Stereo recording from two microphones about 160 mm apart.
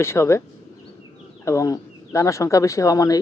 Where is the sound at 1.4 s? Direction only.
20° left (ahead or behind).